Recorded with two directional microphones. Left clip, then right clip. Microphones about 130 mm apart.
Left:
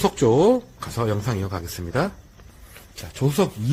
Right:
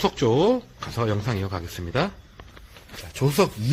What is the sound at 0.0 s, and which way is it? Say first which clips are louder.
Speech: left 3 dB; 20° left (ahead or behind).